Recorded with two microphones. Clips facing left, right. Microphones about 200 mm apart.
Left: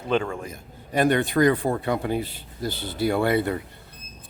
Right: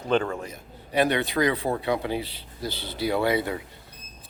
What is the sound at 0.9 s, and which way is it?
Speech, 50° left (ahead or behind).